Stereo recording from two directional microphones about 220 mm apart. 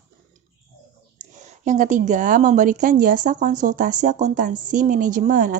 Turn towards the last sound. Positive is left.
turn(degrees=-35)  # may be behind; listen again after turning